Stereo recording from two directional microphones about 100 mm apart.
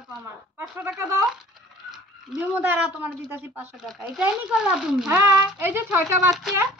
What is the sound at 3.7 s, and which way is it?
Speech, centre (ahead or behind).